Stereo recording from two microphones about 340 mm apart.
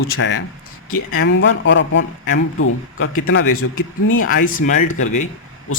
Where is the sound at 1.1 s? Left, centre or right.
Left.